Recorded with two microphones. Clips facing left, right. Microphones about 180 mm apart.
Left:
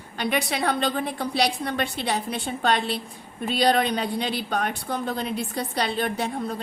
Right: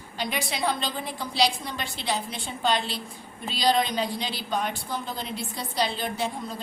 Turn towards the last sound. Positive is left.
turn(degrees=60)  # may be behind; listen again after turning